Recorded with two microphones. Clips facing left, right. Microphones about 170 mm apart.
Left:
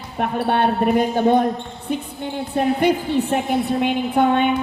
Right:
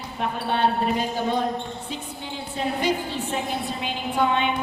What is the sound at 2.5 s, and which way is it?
A woman's voice, 55° left (ahead or behind).